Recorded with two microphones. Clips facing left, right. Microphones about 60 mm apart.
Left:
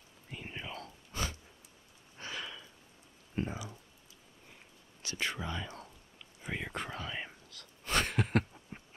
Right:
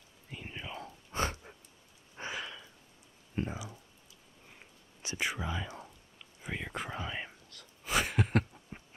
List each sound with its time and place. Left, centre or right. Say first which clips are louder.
0.3 s rain: even; centre
0.7 s a sound: right 5 dB; right
2.3 s sniff: left 2 dB; centre
3.3 s clicking: even; centre
5.0 s whispering: right 2 dB; centre
6.4 s a sound: even; centre
6.9 s whispering: right 2 dB; centre
7.2 s whispering: left 1 dB; centre
7.8 s a sound: right 1 dB; centre